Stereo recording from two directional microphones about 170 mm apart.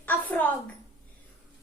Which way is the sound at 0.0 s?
10° left (ahead or behind).